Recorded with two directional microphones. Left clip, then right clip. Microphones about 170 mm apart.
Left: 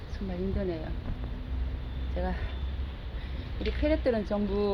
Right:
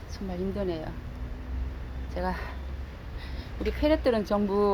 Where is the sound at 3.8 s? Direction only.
25° right (ahead or behind).